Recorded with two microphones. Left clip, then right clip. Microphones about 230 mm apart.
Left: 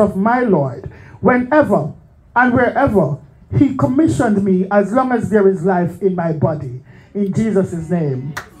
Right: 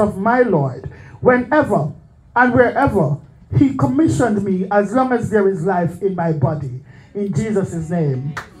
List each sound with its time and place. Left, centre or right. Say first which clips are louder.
0.0 s a man's voice: even; left